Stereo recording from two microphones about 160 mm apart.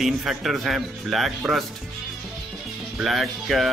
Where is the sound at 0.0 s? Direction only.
Centre (ahead or behind).